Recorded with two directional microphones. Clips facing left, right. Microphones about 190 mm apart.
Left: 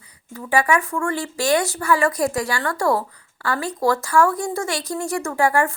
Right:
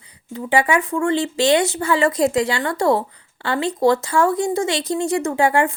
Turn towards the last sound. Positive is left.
turn(degrees=-20)  # may be behind; listen again after turning